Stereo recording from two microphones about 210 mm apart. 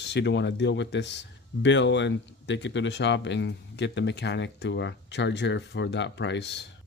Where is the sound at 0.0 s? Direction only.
55° left (ahead or behind).